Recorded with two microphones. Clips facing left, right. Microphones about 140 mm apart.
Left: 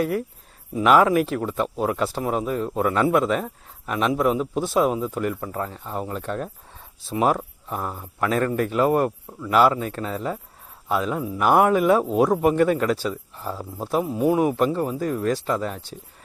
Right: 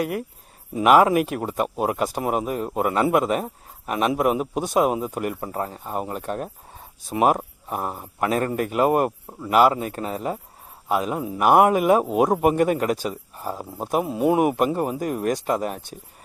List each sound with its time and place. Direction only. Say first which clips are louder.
0.8 s speech: right 1 dB; 15° right (ahead or behind)
5.3 s speech: even; 30° right (ahead or behind)
5.8 s a man's voice: right 1 dB; 15° right (ahead or behind)
8.3 s speech: left 1 dB; 30° right (ahead or behind)
8.7 s speech: right 2 dB; 15° right (ahead or behind)